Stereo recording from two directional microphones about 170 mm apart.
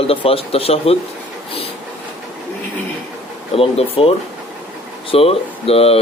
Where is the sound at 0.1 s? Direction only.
35° left (ahead or behind).